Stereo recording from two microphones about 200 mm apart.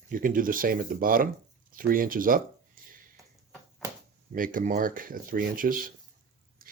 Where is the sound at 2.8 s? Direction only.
45° right (ahead or behind).